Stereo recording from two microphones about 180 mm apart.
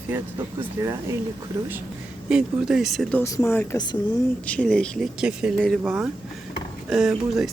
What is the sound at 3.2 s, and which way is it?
Speech, 15° left (ahead or behind).